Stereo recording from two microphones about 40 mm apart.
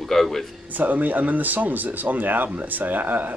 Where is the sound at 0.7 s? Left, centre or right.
Right.